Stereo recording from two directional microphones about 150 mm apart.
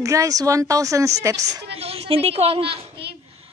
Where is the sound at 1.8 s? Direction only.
40° right (ahead or behind).